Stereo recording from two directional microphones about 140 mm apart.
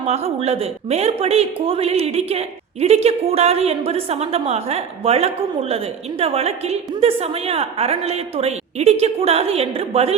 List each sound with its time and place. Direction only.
0.1 s a woman's voice: 50° right (ahead or behind)